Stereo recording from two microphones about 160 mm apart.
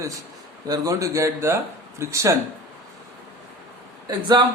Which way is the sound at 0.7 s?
20° right (ahead or behind).